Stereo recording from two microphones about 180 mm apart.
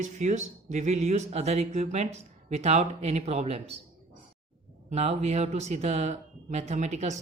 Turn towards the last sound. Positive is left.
turn(degrees=-40)  # may be behind; listen again after turning